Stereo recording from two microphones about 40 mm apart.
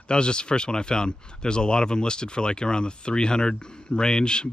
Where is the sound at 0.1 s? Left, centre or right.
Left.